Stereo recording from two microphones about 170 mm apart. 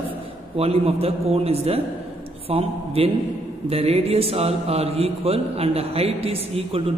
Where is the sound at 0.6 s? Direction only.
35° right (ahead or behind).